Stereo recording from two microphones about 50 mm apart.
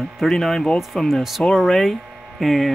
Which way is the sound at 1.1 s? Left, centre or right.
Centre.